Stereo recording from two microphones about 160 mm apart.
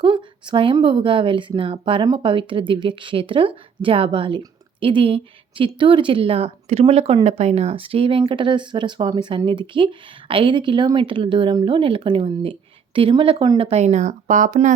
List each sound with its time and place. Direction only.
0.0 s speech: 30° right (ahead or behind); by 14.7 s 50° right (ahead or behind)